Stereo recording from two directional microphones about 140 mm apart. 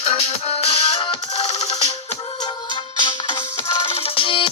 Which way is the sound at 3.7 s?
40° left (ahead or behind).